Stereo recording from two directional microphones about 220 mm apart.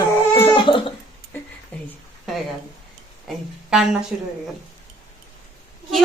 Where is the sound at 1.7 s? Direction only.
5° left (ahead or behind).